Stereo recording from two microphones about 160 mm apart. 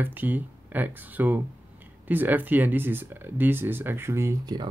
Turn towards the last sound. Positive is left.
turn(degrees=-25)  # may be behind; listen again after turning